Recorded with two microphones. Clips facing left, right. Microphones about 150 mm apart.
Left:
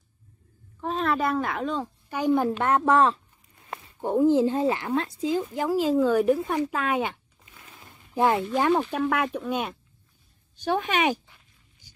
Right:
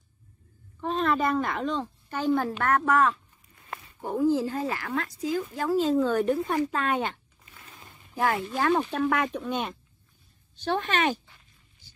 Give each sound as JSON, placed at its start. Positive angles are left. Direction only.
{"t": 0.7, "sound": "a woman's voice", "side_deg": 0}
{"t": 2.6, "sound": "a woman's voice", "side_deg": 25}
{"t": 8.1, "sound": "speech", "side_deg": 20}
{"t": 9.0, "sound": "a woman's voice", "side_deg": 5}
{"t": 11.8, "sound": "a sound", "side_deg": 15}